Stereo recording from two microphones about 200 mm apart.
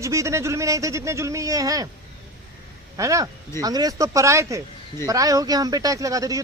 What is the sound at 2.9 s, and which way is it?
A man's voice, 15° right (ahead or behind).